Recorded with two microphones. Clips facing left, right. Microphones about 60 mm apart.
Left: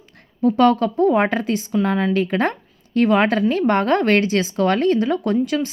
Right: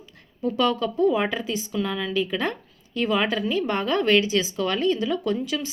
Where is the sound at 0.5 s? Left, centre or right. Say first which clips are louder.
Left 6 dB; left.